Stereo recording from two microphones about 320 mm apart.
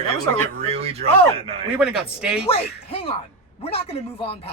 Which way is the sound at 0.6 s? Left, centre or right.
Centre.